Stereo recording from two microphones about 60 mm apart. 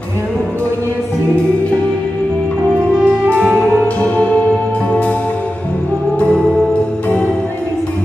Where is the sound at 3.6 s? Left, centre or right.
Left.